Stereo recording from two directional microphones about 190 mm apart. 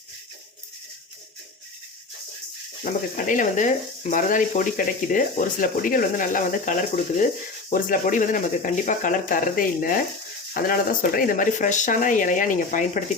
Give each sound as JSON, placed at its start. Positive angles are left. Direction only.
{"t": 2.8, "sound": "speech", "side_deg": 45}